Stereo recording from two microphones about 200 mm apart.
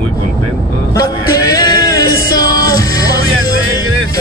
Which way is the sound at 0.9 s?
20° left (ahead or behind).